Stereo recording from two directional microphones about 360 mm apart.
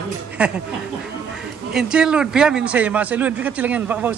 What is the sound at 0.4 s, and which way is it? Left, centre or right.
Speech, centre.